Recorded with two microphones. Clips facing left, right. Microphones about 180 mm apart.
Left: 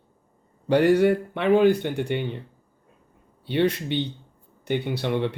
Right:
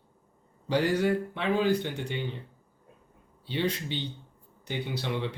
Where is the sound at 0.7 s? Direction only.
60° left (ahead or behind).